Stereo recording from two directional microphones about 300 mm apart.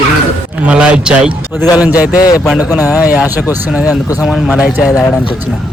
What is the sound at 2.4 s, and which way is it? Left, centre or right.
A man's voice, centre.